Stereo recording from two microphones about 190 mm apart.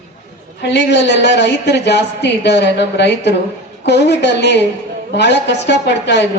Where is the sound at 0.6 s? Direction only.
65° left (ahead or behind).